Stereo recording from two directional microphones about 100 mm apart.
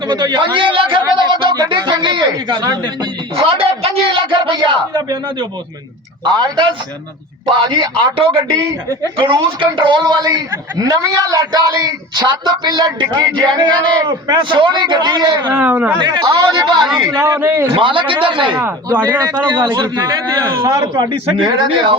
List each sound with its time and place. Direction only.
0.1 s a man's voice: 45° right (ahead or behind); by 1.0 s 60° right (ahead or behind)
1.5 s speech: 45° right (ahead or behind)
3.3 s a sound: 70° right (ahead or behind); by 5.5 s 45° right (ahead or behind)
6.2 s speech: 45° right (ahead or behind)
7.7 s a man's voice: 55° right (ahead or behind)
15.5 s speech: 15° right (ahead or behind)
16.0 s speech: 45° right (ahead or behind)
16.8 s a man's voice: 5° right (ahead or behind)
17.2 s speech: 25° right (ahead or behind)
17.7 s a man's voice: 60° right (ahead or behind)
18.6 s speech: 20° right (ahead or behind)
19.5 s speech: 50° right (ahead or behind)